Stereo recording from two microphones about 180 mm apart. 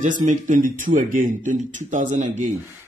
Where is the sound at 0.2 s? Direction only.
45° right (ahead or behind).